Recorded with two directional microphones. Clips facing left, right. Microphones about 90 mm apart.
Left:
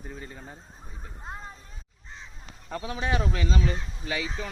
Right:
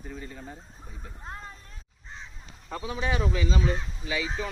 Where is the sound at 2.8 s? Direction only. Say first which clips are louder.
Even; 60° left (ahead or behind).